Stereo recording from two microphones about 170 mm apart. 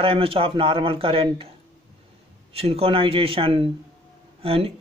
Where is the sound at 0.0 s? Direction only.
30° right (ahead or behind).